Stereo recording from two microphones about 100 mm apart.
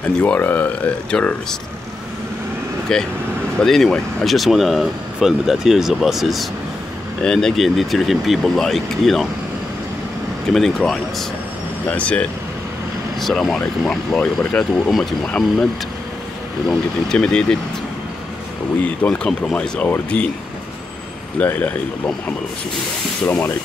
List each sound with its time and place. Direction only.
0.2 s speech: 20° left (ahead or behind)
2.9 s speech: 5° left (ahead or behind)
10.5 s speech: centre (ahead or behind)
11.9 s speech: 10° left (ahead or behind)
14.9 s speech: centre (ahead or behind)
16.6 s speech: 10° left (ahead or behind)
18.8 s speech: 10° left (ahead or behind)
21.4 s speech: 15° left (ahead or behind)
23.2 s speech: 20° left (ahead or behind)